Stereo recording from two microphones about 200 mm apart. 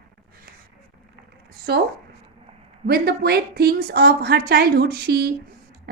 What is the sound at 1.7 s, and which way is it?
Speech, 50° right (ahead or behind).